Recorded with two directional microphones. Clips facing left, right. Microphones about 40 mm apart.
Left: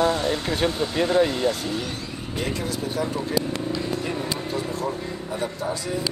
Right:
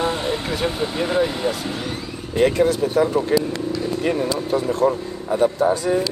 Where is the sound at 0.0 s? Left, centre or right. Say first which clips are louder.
Even; right.